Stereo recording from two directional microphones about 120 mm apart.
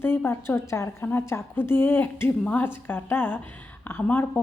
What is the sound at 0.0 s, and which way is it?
A woman's voice, 15° left (ahead or behind).